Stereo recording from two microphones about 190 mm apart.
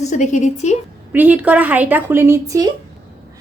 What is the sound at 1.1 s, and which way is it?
A woman's voice, 10° right (ahead or behind).